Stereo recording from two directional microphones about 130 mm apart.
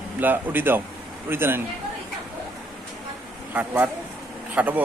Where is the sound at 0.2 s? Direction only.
15° right (ahead or behind).